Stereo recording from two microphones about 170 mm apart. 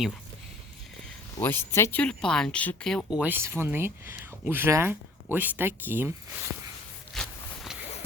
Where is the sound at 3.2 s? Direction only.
15° right (ahead or behind).